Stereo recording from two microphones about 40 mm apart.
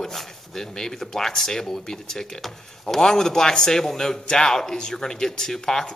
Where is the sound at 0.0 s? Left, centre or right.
Centre.